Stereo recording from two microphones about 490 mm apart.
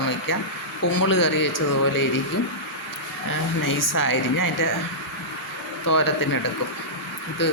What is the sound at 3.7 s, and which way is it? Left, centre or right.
Speech, left.